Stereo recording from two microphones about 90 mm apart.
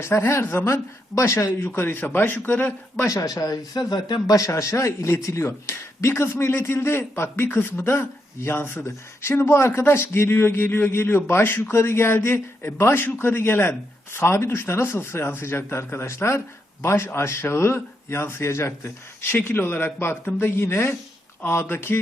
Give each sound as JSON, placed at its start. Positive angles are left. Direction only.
{"t": 0.0, "sound": "speech", "side_deg": 30}
{"t": 3.1, "sound": "speech", "side_deg": 40}